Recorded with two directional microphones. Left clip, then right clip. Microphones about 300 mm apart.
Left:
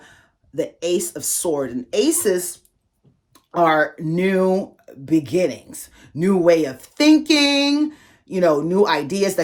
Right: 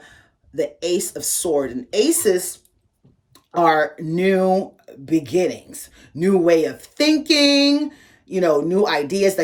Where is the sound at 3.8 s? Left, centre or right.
Centre.